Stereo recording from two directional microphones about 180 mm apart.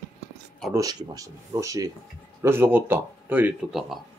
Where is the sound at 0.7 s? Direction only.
20° right (ahead or behind).